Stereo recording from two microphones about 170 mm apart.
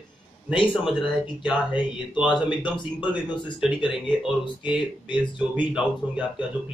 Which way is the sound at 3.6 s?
5° right (ahead or behind).